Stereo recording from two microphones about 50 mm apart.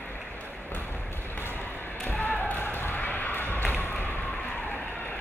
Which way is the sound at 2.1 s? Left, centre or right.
Left.